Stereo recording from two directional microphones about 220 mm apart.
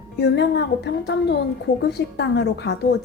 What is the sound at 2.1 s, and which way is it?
Speech, 50° left (ahead or behind).